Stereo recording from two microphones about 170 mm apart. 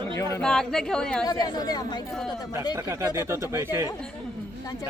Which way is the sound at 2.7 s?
15° right (ahead or behind).